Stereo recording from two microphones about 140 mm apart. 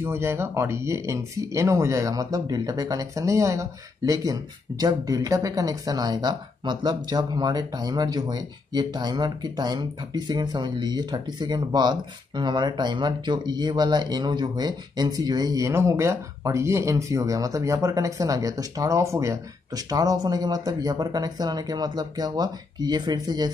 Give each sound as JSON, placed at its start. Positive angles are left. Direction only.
{"t": 0.0, "sound": "speech", "side_deg": -20}